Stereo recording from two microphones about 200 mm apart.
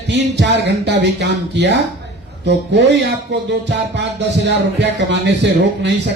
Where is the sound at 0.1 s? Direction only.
60° right (ahead or behind).